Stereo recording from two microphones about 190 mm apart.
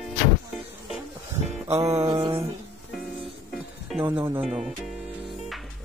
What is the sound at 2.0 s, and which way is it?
Mantra, 25° right (ahead or behind).